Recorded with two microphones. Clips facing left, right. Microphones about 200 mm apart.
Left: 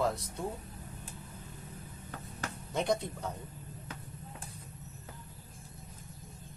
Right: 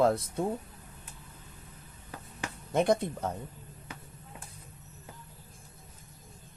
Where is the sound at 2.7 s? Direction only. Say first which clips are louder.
Right 6 dB; 55° right (ahead or behind).